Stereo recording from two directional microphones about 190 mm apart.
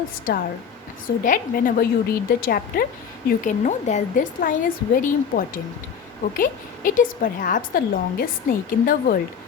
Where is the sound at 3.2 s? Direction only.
40° left (ahead or behind).